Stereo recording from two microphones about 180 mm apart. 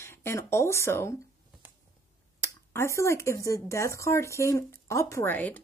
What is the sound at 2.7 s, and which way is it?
Speech, 15° left (ahead or behind).